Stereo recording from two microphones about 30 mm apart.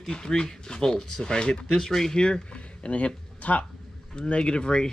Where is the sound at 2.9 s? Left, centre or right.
Left.